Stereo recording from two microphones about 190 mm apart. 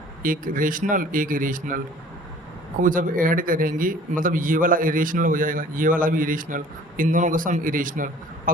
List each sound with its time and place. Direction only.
0.2 s speech: 45° right (ahead or behind)
2.8 s speech: 45° right (ahead or behind)